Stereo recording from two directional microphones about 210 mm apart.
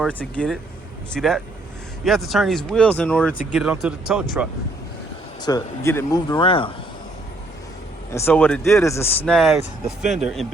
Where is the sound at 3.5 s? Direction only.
5° right (ahead or behind).